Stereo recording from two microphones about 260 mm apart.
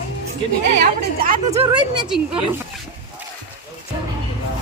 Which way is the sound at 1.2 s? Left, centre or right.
Right.